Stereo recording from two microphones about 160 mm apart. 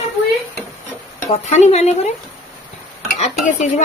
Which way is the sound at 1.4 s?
45° left (ahead or behind).